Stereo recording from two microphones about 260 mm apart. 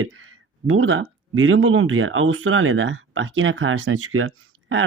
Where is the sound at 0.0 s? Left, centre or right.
Right.